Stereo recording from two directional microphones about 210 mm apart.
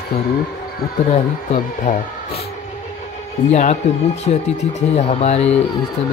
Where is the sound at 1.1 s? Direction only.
40° left (ahead or behind).